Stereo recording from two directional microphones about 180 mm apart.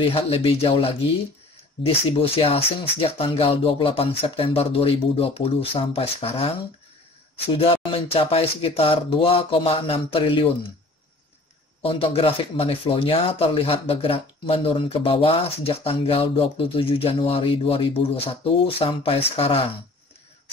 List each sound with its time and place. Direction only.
0.1 s speech: 30° left (ahead or behind)
7.5 s speech: 30° left (ahead or behind)
11.8 s speech: 30° left (ahead or behind)